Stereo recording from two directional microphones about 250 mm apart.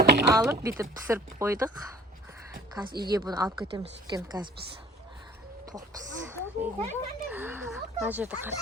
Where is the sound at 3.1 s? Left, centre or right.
Centre.